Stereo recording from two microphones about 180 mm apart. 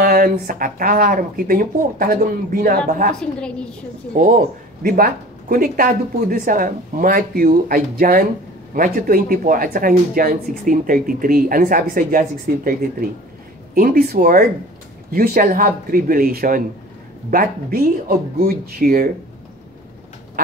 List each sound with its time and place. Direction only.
0.0 s speech: 55° right (ahead or behind)
3.2 s a woman's voice: 5° left (ahead or behind)
4.8 s speech: 55° right (ahead or behind)